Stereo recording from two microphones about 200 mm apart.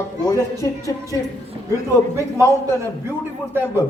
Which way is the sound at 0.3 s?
15° left (ahead or behind).